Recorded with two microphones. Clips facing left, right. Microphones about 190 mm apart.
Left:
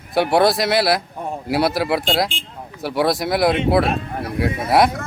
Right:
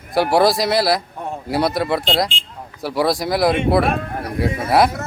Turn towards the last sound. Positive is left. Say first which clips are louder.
# even
turn(degrees=0)  # may be behind; listen again after turning